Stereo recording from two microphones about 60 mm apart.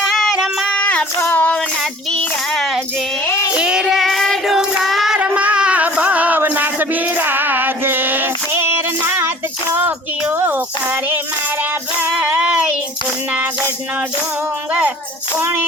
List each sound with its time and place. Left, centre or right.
0.0 s singing: centre
0.8 s child singing: left
3.5 s child singing: centre
4.0 s child singing: centre
5.1 s music: right
6.5 s a sound: right
12.2 s child singing: right
14.7 s a sound: right
15.4 s music: right